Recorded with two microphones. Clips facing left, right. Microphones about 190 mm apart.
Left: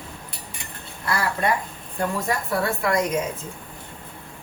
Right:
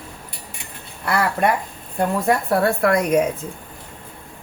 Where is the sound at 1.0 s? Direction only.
65° right (ahead or behind).